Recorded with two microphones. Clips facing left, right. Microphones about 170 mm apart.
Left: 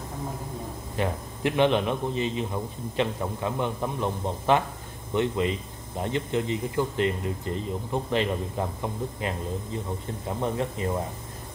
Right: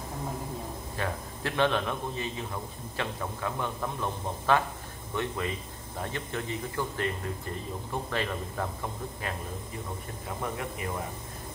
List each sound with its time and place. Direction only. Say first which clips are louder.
0.9 s speech: left 6 dB; 20° left (ahead or behind)